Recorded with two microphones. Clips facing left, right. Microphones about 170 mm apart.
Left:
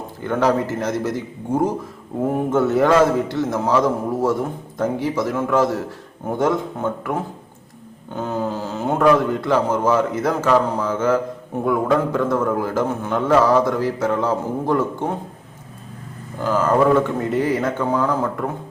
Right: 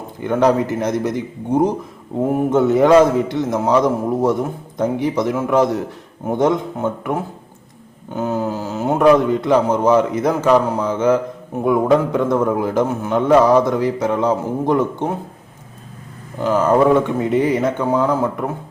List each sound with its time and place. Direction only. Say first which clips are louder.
0.2 s a man's voice: right 3 dB; 15° right (ahead or behind)
16.4 s a man's voice: right 3 dB; 15° right (ahead or behind)